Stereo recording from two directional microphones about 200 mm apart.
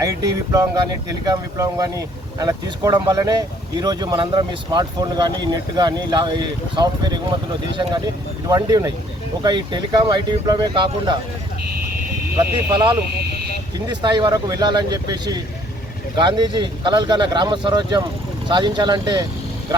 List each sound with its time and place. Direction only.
0.0 s speech: 20° right (ahead or behind)
12.7 s speech: 25° right (ahead or behind)